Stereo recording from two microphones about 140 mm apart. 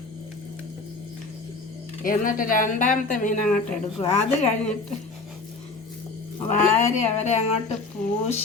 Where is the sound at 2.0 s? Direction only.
80° left.